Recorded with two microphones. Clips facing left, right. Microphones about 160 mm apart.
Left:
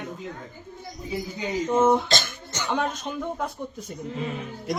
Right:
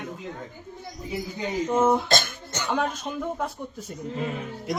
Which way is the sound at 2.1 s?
55° right (ahead or behind).